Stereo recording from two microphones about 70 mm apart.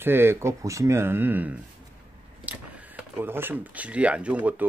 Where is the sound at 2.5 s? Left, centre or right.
Centre.